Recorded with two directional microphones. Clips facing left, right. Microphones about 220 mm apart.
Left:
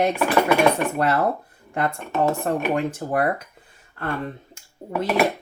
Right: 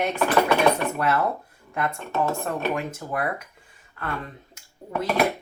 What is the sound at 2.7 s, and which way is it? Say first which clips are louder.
Speech: left 5 dB; 35° left (ahead or behind).